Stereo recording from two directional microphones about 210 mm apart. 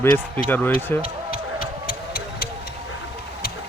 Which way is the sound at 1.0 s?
45° left (ahead or behind).